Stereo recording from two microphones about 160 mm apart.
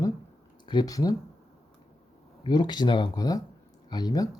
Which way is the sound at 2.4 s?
25° left (ahead or behind).